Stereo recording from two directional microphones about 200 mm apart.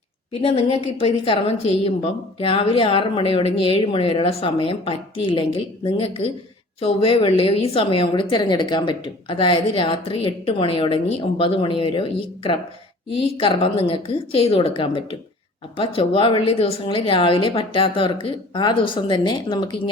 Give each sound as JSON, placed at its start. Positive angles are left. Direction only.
{"t": 0.4, "sound": "a woman's voice", "side_deg": 30}
{"t": 15.8, "sound": "a woman's voice", "side_deg": 25}